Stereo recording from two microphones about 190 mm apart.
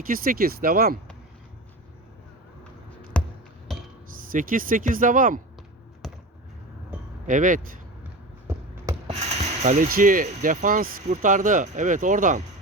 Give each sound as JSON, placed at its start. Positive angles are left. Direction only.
{"t": 0.1, "sound": "speech", "side_deg": -50}
{"t": 3.1, "sound": "music", "side_deg": 5}
{"t": 4.3, "sound": "speech", "side_deg": -45}
{"t": 7.3, "sound": "speech", "side_deg": -45}
{"t": 8.4, "sound": "basketball bounce", "side_deg": -15}
{"t": 9.0, "sound": "speech", "side_deg": -35}